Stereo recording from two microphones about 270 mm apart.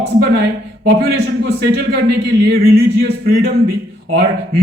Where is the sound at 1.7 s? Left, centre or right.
Right.